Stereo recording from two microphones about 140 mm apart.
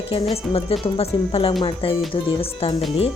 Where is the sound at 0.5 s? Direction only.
45° left (ahead or behind).